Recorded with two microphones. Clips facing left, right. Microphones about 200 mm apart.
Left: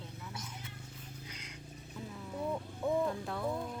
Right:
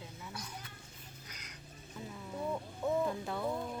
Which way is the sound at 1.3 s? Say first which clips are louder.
Left 4 dB; 30° left (ahead or behind).